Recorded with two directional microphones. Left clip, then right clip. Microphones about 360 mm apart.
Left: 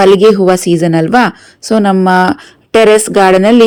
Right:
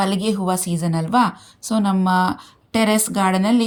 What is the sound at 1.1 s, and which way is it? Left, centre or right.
A woman's voice, centre.